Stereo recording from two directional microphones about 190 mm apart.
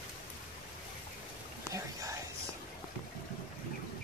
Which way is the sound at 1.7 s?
15° right (ahead or behind).